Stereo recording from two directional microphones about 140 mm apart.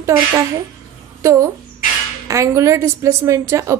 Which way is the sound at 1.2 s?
20° right (ahead or behind).